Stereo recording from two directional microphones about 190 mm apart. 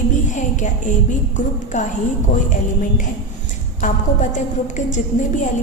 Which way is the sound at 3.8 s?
40° left (ahead or behind).